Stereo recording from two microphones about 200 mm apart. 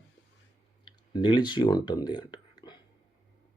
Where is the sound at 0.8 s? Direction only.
25° left (ahead or behind).